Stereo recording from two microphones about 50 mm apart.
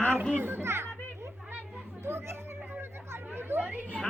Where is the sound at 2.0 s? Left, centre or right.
Right.